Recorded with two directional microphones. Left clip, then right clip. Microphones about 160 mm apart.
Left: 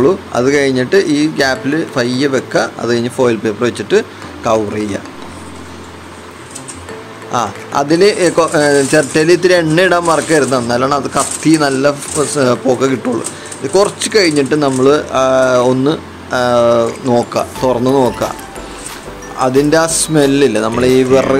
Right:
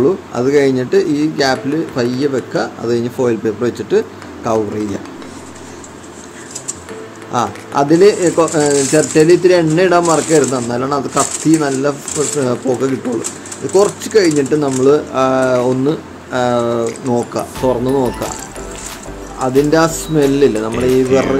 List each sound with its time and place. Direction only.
0.0 s speech: centre (ahead or behind)
7.2 s speech: 5° right (ahead or behind)
17.6 s speech: 15° left (ahead or behind)
19.4 s speech: 10° left (ahead or behind)